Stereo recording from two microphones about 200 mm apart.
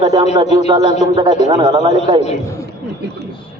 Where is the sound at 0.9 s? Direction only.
35° left (ahead or behind).